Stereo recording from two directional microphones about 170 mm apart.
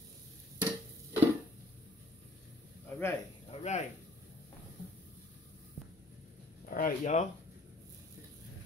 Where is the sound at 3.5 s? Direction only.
40° left (ahead or behind).